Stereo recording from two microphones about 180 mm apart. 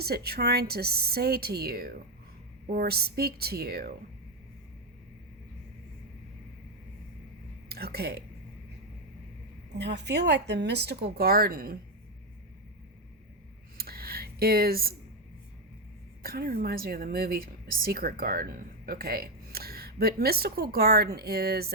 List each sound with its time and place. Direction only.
0.0 s a woman's voice: 60° right (ahead or behind)
7.7 s speech: 60° right (ahead or behind)
9.7 s a woman's voice: 70° right (ahead or behind); by 11.8 s 55° right (ahead or behind)
13.7 s a sound: 60° right (ahead or behind)
16.2 s a woman's voice: 55° right (ahead or behind)